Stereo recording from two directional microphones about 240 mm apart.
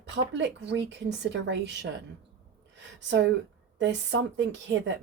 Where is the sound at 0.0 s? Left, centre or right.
Right.